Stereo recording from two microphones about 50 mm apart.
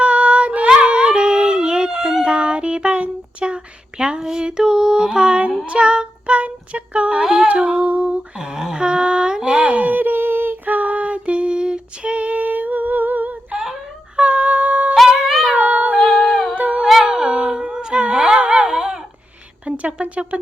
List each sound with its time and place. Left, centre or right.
0.0 s child singing: right
0.8 s dog: right
5.6 s child singing: right
7.4 s humming: right
8.4 s a sound: centre; by 13.6 s right
14.2 s music: right
15.0 s music: centre
15.5 s cat: right
16.0 s humming: centre
16.6 s howl: right
16.8 s a sound: centre; by 20.4 s right